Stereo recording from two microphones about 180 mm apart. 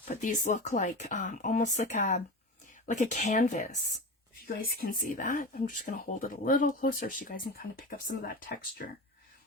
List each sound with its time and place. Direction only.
0.1 s speech: 45° left (ahead or behind)